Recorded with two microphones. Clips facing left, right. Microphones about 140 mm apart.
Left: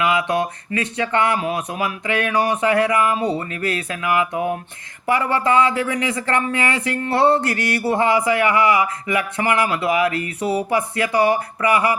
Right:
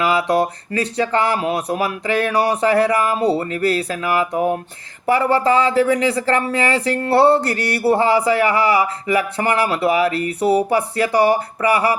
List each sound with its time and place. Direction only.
0.0 s speech: 35° right (ahead or behind)